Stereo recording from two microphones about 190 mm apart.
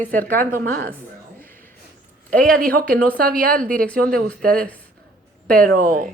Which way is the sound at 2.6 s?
50° right (ahead or behind).